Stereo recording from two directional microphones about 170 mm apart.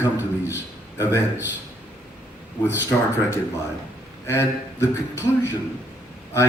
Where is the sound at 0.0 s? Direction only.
10° right (ahead or behind).